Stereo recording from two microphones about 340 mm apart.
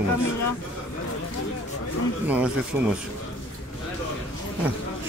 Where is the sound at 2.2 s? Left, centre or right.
Centre.